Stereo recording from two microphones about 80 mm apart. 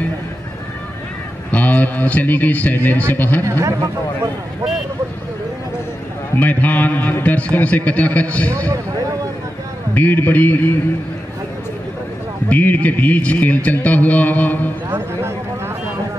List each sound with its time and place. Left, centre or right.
1.5 s a man's voice: centre
3.4 s speech: right
6.4 s a man's voice: left
9.9 s a man's voice: left
12.4 s a man's voice: centre
14.9 s speech: right